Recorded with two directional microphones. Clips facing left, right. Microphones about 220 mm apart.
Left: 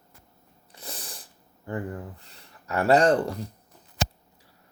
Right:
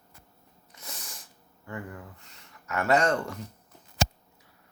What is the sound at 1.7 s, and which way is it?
Speech, 35° left (ahead or behind).